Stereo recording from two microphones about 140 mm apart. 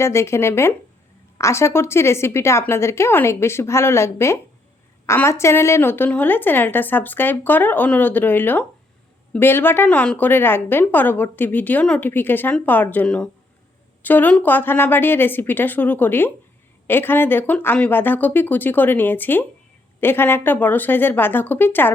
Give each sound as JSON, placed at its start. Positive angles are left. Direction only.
{"t": 0.0, "sound": "a woman's voice", "side_deg": 20}